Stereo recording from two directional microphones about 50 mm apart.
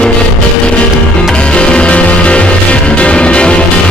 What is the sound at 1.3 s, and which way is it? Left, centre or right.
Music, left.